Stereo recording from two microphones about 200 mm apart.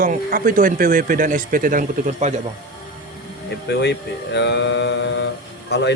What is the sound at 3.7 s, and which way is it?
Speech, 60° left (ahead or behind).